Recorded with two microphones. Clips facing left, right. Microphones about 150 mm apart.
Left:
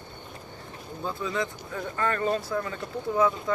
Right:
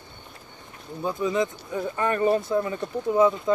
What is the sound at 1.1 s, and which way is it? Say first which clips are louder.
Speech: right 6 dB; 20° right (ahead or behind).